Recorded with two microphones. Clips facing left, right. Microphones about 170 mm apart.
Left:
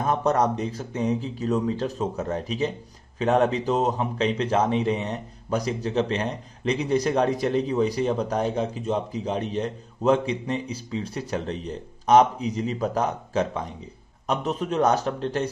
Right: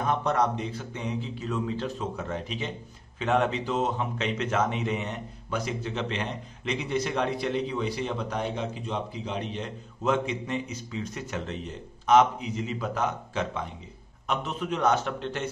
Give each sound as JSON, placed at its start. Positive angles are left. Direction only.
{"t": 0.0, "sound": "speech", "side_deg": 40}